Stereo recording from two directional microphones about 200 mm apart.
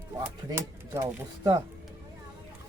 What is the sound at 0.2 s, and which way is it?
Speech, 15° right (ahead or behind).